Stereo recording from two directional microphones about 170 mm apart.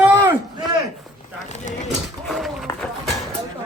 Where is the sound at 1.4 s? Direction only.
45° left (ahead or behind).